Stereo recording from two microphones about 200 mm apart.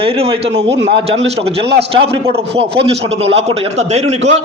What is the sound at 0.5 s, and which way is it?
Speech, 60° right (ahead or behind).